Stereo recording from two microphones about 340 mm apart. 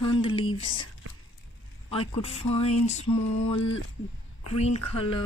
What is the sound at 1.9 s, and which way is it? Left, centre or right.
Speech, centre.